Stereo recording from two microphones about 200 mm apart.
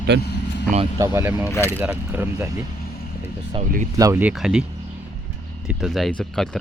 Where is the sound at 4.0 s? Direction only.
10° right (ahead or behind).